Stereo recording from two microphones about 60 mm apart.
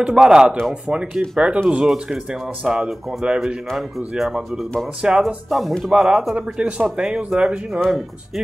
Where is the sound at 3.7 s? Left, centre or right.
Centre.